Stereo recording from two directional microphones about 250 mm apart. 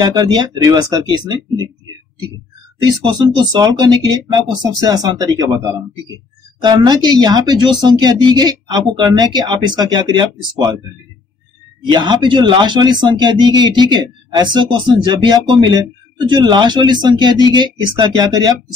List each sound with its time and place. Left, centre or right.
0.0 s speech: centre
2.8 s speech: centre
11.9 s speech: centre